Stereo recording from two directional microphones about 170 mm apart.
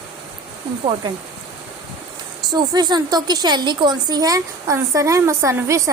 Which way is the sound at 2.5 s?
25° right (ahead or behind).